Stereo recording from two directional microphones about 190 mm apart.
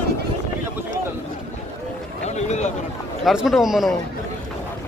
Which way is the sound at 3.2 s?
Centre (ahead or behind).